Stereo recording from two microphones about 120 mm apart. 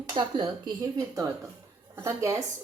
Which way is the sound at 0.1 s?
40° right (ahead or behind).